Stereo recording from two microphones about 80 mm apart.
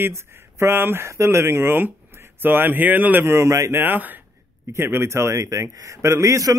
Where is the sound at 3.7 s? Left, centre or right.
Right.